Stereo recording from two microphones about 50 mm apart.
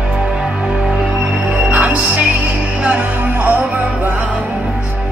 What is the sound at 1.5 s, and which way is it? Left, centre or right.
Music, right.